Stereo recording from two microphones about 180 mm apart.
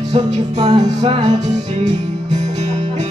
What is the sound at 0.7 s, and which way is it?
Music, 30° right (ahead or behind).